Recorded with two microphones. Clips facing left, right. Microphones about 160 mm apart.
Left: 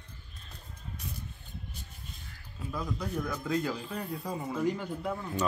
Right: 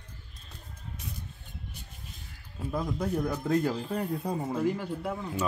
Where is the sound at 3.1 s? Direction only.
35° right (ahead or behind).